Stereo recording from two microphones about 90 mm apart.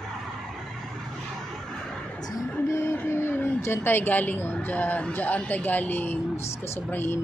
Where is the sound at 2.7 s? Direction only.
25° left (ahead or behind).